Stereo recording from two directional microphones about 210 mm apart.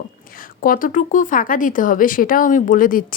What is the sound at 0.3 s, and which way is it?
Speech, 40° left (ahead or behind).